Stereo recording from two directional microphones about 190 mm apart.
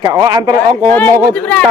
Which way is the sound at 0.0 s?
20° right (ahead or behind).